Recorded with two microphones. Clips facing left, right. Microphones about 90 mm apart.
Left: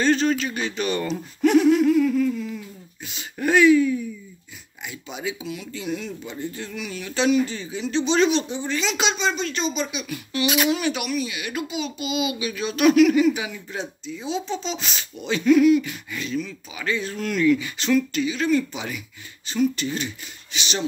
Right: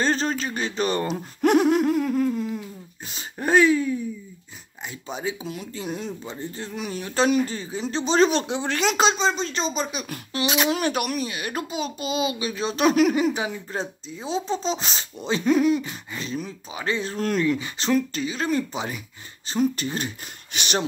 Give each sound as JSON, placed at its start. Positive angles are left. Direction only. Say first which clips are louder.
{"t": 0.0, "sound": "a child's voice", "louder": "left 3 dB", "side_deg": -35}
{"t": 1.0, "sound": "a child's voice", "louder": "even", "side_deg": -50}
{"t": 5.1, "sound": "a child's voice", "louder": "right 1 dB", "side_deg": -35}
{"t": 8.5, "sound": "speech", "louder": "right 2 dB", "side_deg": -90}
{"t": 8.7, "sound": "a child's voice", "louder": "right 4 dB", "side_deg": -45}
{"t": 10.4, "sound": "speech", "louder": "left 1 dB", "side_deg": -30}
{"t": 10.8, "sound": "a child's voice", "louder": "even", "side_deg": -45}
{"t": 20.5, "sound": "speech", "louder": "right 3 dB", "side_deg": -50}